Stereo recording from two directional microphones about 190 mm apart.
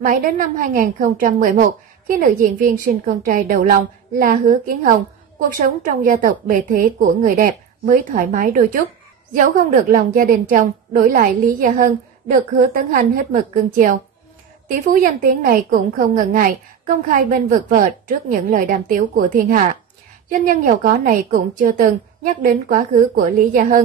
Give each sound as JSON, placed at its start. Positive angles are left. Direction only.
{"t": 0.0, "sound": "a woman's voice", "side_deg": -45}
{"t": 9.8, "sound": "a woman's voice", "side_deg": -45}